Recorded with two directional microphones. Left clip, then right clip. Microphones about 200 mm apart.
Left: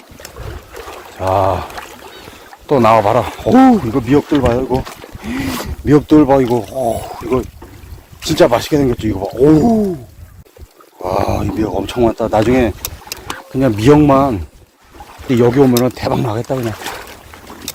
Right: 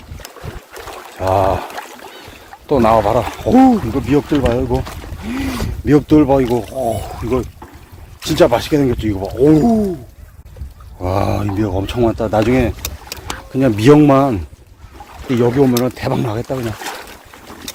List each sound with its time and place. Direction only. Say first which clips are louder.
0.7 s trickle: right 1 dB; 15° left (ahead or behind)
1.3 s speech: left 1 dB; 5° right (ahead or behind)
1.6 s a sound: even; 5° left (ahead or behind)
2.6 s speech: left 2 dB; 10° left (ahead or behind)
8.2 s speech: left 1 dB; 15° left (ahead or behind)
11.0 s speech: left 2 dB; 10° left (ahead or behind)
13.5 s speech: even; centre (ahead or behind)
15.3 s speech: left 3 dB; 30° left (ahead or behind)
15.8 s speech: left 2 dB; 15° left (ahead or behind)
16.6 s a sound: left 2 dB; 25° left (ahead or behind)